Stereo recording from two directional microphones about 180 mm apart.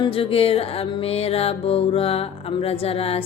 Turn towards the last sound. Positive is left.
turn(degrees=35)  # may be behind; listen again after turning